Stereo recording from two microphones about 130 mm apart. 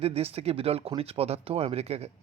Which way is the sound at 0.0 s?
50° right (ahead or behind).